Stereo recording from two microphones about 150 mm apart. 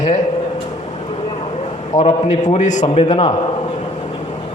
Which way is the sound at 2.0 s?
50° left (ahead or behind).